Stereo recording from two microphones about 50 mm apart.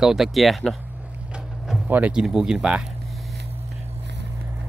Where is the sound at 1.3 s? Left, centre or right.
Centre.